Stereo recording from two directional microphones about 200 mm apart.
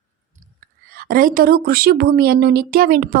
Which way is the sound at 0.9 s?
45° right (ahead or behind).